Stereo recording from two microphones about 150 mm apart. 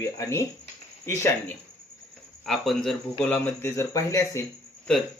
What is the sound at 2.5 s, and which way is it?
Speech, centre (ahead or behind).